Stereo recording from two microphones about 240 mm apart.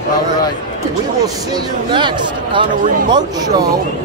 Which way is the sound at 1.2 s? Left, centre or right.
Centre.